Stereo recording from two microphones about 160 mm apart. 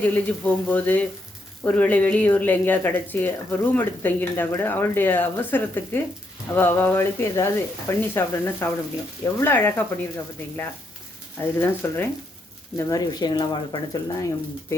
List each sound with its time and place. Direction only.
0.0 s speech: 10° left (ahead or behind)
11.3 s speech: 15° left (ahead or behind)